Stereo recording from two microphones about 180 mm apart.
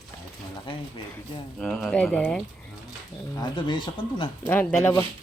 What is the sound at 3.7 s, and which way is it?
Speech, 25° left (ahead or behind).